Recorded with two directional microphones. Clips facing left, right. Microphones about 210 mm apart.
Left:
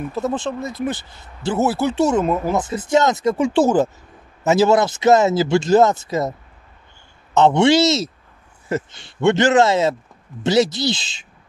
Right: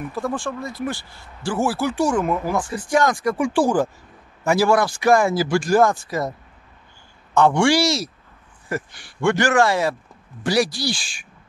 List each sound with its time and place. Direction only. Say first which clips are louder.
0.1 s speech: left 3 dB; 20° left (ahead or behind)
7.3 s speech: left 3 dB; 20° left (ahead or behind)